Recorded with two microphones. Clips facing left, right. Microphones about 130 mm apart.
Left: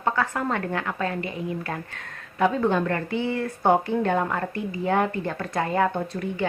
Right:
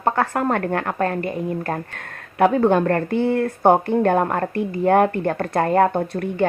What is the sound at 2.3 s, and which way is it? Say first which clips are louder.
A woman's voice: right 6 dB; 60° right (ahead or behind).